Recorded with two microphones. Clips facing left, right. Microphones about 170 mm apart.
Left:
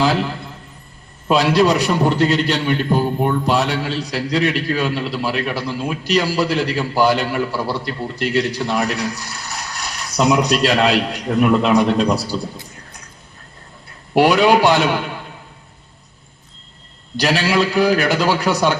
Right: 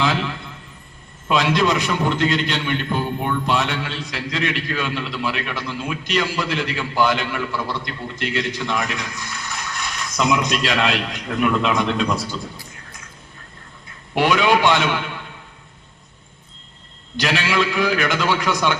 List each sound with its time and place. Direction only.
0.0 s a sound: 40° left (ahead or behind)
1.3 s a man's voice: 35° left (ahead or behind)
14.1 s a man's voice: 35° left (ahead or behind)
17.2 s a man's voice: 35° left (ahead or behind)